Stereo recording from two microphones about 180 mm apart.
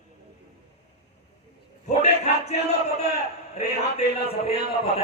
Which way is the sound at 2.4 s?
35° left (ahead or behind).